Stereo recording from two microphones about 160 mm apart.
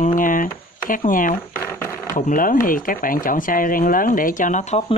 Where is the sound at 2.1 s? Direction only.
60° left (ahead or behind).